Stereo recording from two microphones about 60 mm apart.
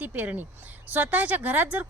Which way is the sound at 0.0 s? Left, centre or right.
Right.